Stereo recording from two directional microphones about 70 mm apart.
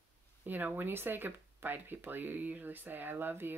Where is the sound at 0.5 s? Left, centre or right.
Right.